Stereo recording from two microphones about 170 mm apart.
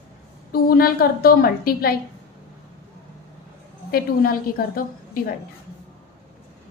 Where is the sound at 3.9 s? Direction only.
60° left (ahead or behind).